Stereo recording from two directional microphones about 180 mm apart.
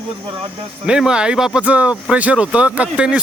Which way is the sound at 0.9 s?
5° right (ahead or behind).